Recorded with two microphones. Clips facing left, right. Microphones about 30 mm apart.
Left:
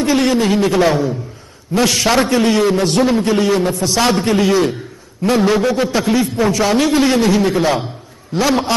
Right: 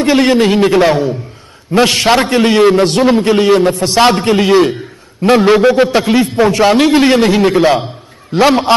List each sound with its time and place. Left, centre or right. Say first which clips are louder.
0.0 s a man's voice: right 5 dB; right